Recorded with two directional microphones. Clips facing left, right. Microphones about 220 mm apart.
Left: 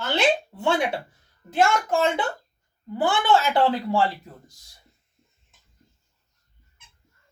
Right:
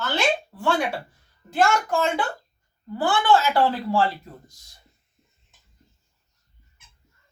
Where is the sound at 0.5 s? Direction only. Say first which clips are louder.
Left 1 dB; 20° left (ahead or behind).